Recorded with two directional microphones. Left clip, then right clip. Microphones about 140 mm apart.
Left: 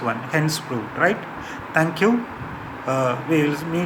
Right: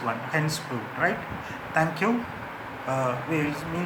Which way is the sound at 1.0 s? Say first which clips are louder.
Left 6 dB; 35° left (ahead or behind).